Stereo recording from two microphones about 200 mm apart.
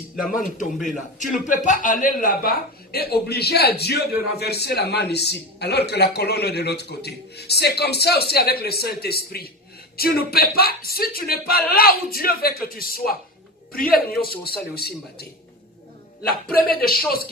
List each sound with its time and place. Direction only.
0.3 s a man's voice: 40° left (ahead or behind)